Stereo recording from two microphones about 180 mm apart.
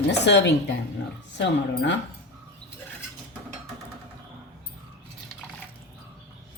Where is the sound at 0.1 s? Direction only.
70° left (ahead or behind).